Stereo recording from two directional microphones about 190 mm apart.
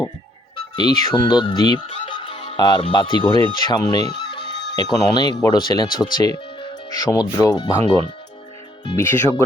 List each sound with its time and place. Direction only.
0.8 s speech: 25° left (ahead or behind)
4.1 s music: 60° left (ahead or behind)
4.8 s speech: 20° left (ahead or behind)
8.8 s speech: 20° left (ahead or behind)